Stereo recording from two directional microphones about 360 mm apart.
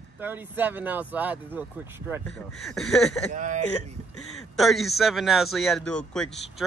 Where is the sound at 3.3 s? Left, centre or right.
Centre.